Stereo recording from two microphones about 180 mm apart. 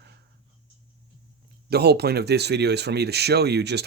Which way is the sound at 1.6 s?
65° right (ahead or behind).